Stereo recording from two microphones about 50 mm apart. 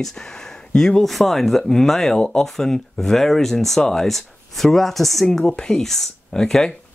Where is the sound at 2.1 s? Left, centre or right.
Centre.